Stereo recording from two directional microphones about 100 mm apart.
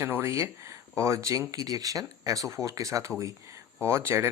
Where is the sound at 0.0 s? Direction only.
25° right (ahead or behind).